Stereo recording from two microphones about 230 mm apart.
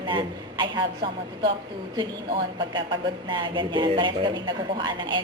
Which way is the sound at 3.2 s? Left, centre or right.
Centre.